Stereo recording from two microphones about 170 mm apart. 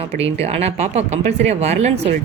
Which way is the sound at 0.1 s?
35° right (ahead or behind).